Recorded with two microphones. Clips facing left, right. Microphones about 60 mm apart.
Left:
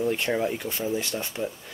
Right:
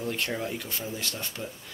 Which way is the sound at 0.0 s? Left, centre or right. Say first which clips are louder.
Left 6 dB; left.